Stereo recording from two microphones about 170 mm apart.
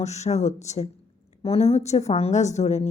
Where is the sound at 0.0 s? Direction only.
40° left (ahead or behind).